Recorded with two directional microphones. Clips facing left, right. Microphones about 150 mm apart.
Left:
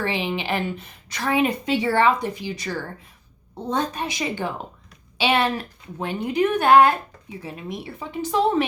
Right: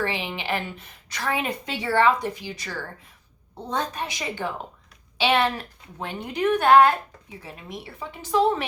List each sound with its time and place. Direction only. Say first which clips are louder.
0.0 s a woman's voice: left 3 dB; 20° left (ahead or behind)